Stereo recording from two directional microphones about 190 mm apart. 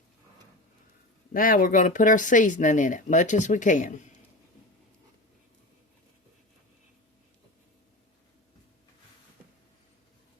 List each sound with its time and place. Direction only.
1.3 s speech: 45° left (ahead or behind)